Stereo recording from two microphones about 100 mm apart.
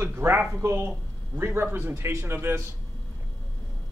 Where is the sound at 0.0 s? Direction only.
25° right (ahead or behind).